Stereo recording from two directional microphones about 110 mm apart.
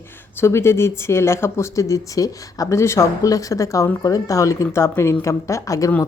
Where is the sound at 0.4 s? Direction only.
25° left (ahead or behind).